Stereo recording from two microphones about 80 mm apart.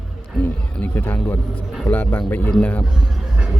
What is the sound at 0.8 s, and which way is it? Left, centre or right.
A man's voice, left.